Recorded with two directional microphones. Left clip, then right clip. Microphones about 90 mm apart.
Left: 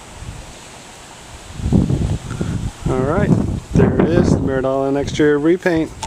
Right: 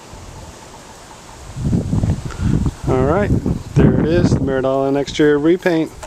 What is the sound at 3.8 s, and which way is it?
Speech, 5° right (ahead or behind).